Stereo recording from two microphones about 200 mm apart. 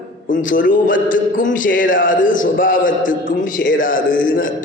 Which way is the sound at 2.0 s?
40° left (ahead or behind).